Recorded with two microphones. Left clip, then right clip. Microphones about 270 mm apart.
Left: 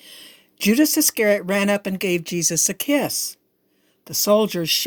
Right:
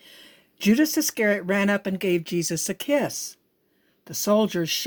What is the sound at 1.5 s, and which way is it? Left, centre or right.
Speech, left.